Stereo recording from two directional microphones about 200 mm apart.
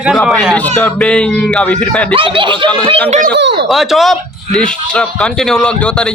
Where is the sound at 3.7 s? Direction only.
Centre (ahead or behind).